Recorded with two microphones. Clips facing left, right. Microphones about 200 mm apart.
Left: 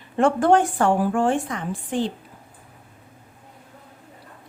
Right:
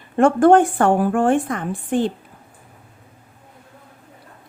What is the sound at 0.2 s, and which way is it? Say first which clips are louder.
A woman's voice: right 5 dB; 50° right (ahead or behind).